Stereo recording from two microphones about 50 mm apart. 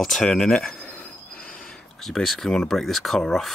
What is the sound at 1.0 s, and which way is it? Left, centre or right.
Train wheels squealing, left.